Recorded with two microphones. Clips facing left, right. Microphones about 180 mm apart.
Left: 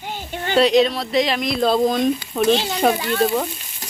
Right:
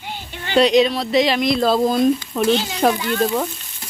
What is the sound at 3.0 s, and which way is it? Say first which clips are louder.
Speech: even; 40° left (ahead or behind).